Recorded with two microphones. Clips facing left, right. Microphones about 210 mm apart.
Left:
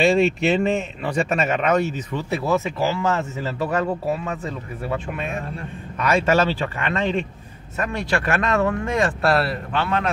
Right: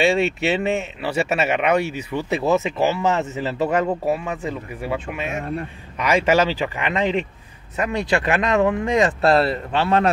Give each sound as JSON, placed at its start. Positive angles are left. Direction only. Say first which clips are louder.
{"t": 0.0, "sound": "speech", "louder": "left 1 dB", "side_deg": 0}